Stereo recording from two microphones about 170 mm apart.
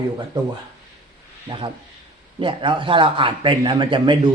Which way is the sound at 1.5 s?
30° right (ahead or behind).